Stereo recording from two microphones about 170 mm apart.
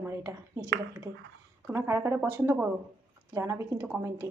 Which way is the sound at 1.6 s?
15° right (ahead or behind).